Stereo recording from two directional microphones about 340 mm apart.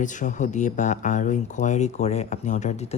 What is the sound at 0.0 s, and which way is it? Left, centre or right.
Speech, left.